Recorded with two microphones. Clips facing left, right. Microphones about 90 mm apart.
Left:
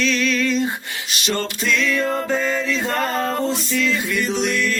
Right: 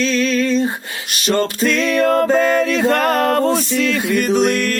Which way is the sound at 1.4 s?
55° right (ahead or behind).